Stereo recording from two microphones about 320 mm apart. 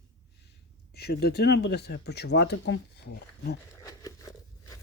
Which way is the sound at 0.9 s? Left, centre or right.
Left.